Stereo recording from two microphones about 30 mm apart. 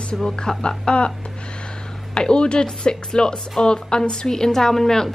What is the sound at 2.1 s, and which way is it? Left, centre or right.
A woman's voice, left.